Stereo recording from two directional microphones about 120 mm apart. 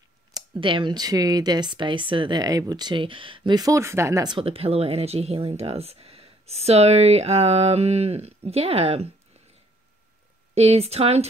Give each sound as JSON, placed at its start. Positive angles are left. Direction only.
{"t": 0.6, "sound": "speech", "side_deg": -45}
{"t": 4.3, "sound": "speech", "side_deg": -50}
{"t": 10.5, "sound": "speech", "side_deg": -60}